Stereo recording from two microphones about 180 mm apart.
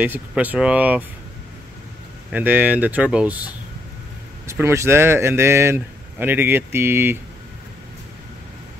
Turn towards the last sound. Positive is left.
turn(degrees=-10)  # may be behind; listen again after turning